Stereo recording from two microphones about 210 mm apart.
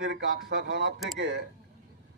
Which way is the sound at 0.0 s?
60° right (ahead or behind).